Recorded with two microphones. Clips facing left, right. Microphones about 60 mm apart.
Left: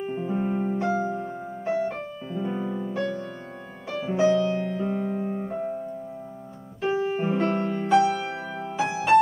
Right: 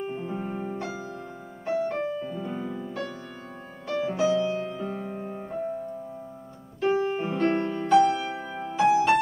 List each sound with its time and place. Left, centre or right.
0.1 s piano: centre
0.4 s music: centre
1.7 s music: centre
5.3 s piano: centre
6.8 s music: centre
7.6 s music: left
7.9 s music: centre